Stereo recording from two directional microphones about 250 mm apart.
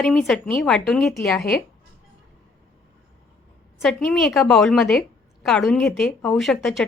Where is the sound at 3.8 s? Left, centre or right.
Centre.